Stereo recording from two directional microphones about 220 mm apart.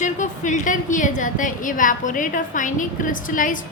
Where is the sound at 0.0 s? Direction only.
35° left (ahead or behind).